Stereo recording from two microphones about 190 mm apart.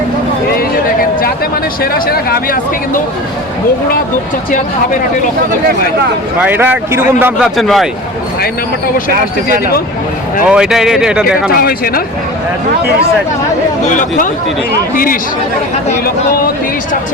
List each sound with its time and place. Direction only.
1.8 s speech: 50° left (ahead or behind)
6.4 s speech: 10° right (ahead or behind)
10.4 s speech: 5° right (ahead or behind)
11.5 s speech: 50° left (ahead or behind)
13.8 s speech: 40° left (ahead or behind)